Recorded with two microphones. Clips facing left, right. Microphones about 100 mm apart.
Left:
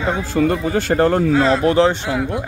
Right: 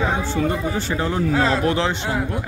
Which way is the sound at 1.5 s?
35° left (ahead or behind).